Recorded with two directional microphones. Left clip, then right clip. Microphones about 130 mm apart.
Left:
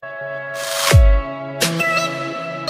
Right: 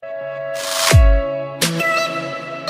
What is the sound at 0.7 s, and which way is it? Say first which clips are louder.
Music: right 1 dB; centre (ahead or behind).